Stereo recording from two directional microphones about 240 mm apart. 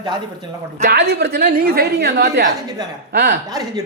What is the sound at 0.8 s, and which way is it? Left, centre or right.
Speech, right.